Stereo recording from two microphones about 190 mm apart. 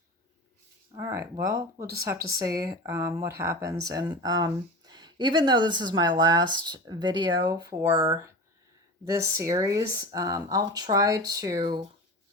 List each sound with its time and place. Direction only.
0.9 s speech: 15° right (ahead or behind)